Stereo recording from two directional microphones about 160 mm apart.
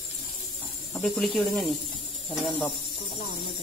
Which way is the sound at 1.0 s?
5° left (ahead or behind).